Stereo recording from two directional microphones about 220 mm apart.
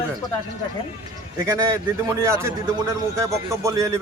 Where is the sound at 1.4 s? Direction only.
15° right (ahead or behind).